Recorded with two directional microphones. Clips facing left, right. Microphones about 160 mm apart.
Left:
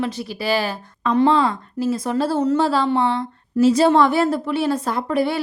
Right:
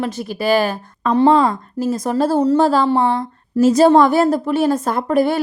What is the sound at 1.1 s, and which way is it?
Speech, 35° right (ahead or behind).